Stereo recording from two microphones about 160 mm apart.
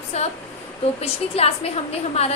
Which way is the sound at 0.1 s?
40° left (ahead or behind).